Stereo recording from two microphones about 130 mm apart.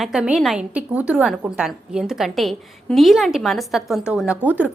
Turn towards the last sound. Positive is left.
turn(degrees=-15)  # may be behind; listen again after turning